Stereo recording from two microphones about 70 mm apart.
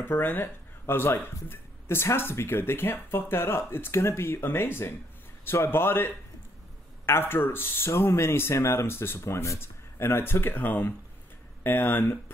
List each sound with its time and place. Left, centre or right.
0.0 s speech: left